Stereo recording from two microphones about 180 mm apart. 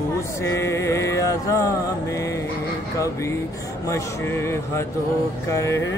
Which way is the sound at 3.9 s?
15° left (ahead or behind).